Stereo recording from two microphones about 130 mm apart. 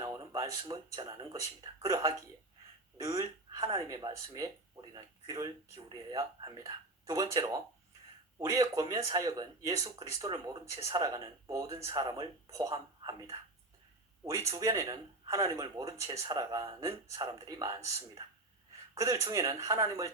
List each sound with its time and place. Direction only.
0.1 s speech: 30° right (ahead or behind)
14.3 s speech: 25° right (ahead or behind)